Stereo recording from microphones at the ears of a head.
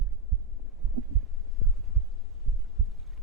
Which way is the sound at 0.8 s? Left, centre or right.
Right.